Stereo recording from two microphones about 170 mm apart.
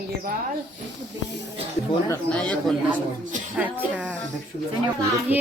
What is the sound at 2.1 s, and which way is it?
Speech, 10° left (ahead or behind).